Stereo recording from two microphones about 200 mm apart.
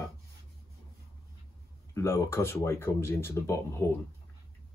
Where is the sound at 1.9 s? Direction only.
15° left (ahead or behind).